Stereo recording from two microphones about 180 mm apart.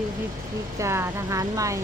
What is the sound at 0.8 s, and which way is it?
Speech, 15° right (ahead or behind).